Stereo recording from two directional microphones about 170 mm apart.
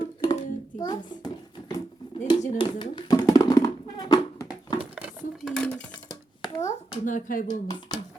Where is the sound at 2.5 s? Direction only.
25° left (ahead or behind).